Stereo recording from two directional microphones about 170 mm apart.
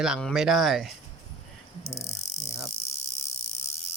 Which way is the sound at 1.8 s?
15° left (ahead or behind).